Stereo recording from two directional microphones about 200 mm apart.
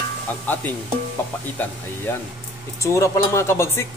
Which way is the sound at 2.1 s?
10° left (ahead or behind).